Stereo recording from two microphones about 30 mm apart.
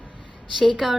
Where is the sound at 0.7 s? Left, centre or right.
Centre.